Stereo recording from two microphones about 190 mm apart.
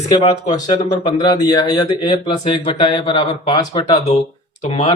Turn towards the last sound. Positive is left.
turn(degrees=35)  # may be behind; listen again after turning